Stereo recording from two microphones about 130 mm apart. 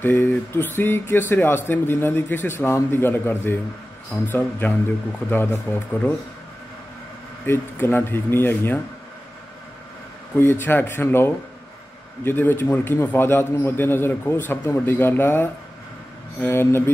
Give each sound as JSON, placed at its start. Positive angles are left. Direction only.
{"t": 0.0, "sound": "a man's voice", "side_deg": 15}
{"t": 7.4, "sound": "a man's voice", "side_deg": 15}
{"t": 10.3, "sound": "a man's voice", "side_deg": 15}